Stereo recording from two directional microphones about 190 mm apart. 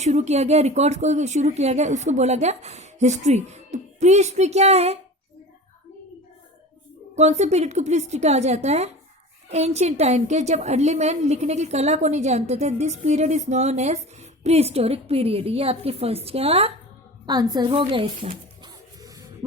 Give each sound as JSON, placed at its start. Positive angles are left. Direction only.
{"t": 0.0, "sound": "a woman's voice", "side_deg": -35}
{"t": 7.2, "sound": "a woman's voice", "side_deg": -35}
{"t": 17.2, "sound": "a sound", "side_deg": -20}